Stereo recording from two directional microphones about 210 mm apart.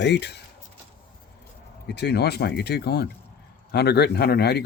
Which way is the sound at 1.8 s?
55° left (ahead or behind).